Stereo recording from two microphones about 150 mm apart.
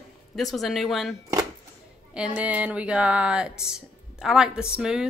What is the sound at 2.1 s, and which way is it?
A woman's voice, 5° right (ahead or behind).